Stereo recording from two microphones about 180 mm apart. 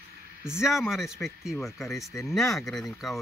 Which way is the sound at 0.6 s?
Centre (ahead or behind).